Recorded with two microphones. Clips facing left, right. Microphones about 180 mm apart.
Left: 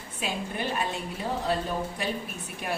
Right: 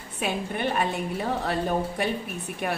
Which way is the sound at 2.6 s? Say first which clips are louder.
Right 3 dB; 60° right (ahead or behind).